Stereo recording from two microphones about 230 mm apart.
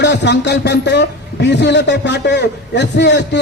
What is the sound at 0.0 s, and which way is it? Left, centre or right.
A man's voice, left.